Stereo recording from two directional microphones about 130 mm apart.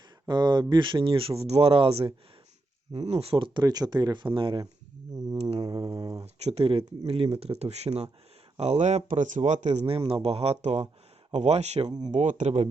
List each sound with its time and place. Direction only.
0.3 s speech: 35° right (ahead or behind)
3.6 s speech: 30° right (ahead or behind)
5.4 s speech: 50° right (ahead or behind)
6.0 s a sound: 30° right (ahead or behind)
6.2 s speech: 50° right (ahead or behind)
12.1 s speech: 70° right (ahead or behind)